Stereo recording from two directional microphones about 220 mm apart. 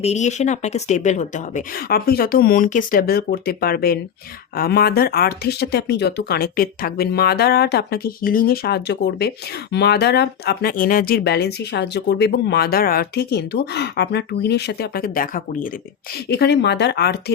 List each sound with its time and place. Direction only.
0.0 s speech: 30° left (ahead or behind); by 17.3 s 50° left (ahead or behind)